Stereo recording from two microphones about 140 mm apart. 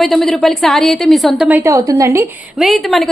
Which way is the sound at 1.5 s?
15° right (ahead or behind).